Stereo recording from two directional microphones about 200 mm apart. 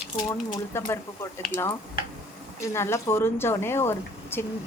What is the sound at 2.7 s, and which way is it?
A woman's voice, 15° left (ahead or behind).